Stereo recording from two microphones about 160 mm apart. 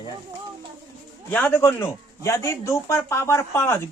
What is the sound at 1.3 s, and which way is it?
Speech, 10° left (ahead or behind).